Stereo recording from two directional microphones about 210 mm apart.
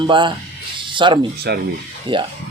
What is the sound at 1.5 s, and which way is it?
Speech, 50° right (ahead or behind).